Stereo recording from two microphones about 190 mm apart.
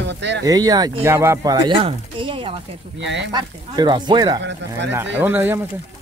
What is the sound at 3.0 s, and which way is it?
Speech, 70° right (ahead or behind).